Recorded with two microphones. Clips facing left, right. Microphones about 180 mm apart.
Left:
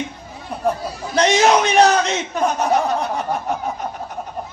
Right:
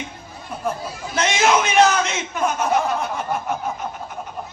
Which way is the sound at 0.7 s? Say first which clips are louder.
Left 5 dB; 35° left (ahead or behind).